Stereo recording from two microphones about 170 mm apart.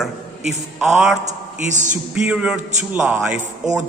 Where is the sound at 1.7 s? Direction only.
45° right (ahead or behind).